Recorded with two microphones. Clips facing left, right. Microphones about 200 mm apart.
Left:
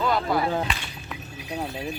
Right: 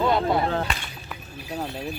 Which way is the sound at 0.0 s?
25° right (ahead or behind).